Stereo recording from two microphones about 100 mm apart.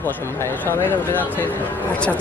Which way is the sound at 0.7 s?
20° left (ahead or behind).